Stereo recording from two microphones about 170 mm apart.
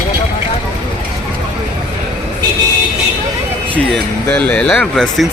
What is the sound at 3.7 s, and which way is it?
Speech, 5° left (ahead or behind).